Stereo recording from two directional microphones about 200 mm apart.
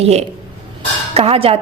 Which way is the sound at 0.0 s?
30° right (ahead or behind).